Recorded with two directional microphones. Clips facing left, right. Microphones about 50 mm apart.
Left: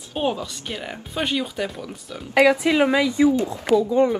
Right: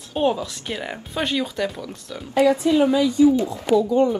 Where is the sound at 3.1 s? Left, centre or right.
Left.